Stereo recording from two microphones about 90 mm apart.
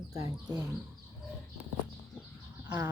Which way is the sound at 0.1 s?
40° right (ahead or behind).